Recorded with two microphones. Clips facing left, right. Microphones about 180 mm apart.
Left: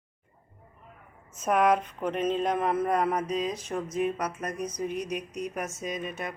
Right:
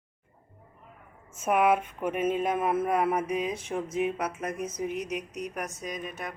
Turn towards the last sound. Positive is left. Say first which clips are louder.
# left 2 dB
turn(degrees=0)  # may be behind; listen again after turning